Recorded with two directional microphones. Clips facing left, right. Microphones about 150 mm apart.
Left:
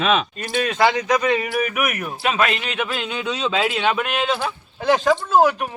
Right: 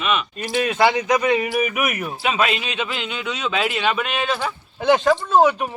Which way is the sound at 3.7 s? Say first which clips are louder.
Left 1 dB; centre (ahead or behind).